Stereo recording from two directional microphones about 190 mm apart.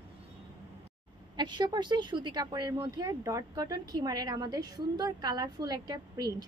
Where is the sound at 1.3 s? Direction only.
25° right (ahead or behind).